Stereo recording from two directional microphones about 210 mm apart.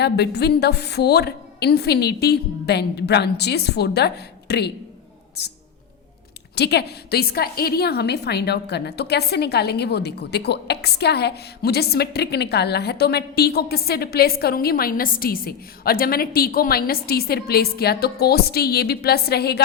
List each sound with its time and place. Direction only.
0.0 s a woman's voice: 50° left (ahead or behind)
6.6 s a woman's voice: 50° left (ahead or behind)